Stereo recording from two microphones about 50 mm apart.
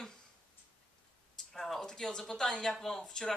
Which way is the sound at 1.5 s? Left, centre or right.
Centre.